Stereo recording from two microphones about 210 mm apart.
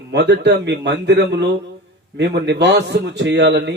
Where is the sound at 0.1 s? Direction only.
55° right (ahead or behind).